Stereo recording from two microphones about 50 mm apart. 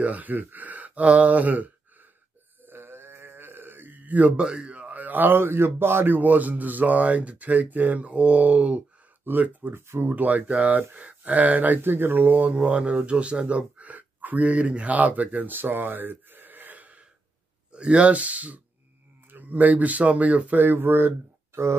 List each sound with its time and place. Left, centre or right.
0.0 s speech: right
2.6 s a sound: right
4.4 s speech: centre; by 9.8 s right
9.8 s speech: right
10.1 s speech: right